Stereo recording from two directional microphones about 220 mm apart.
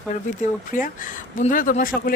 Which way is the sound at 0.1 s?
35° left (ahead or behind).